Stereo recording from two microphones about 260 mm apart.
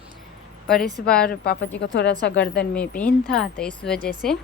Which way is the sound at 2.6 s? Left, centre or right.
Centre.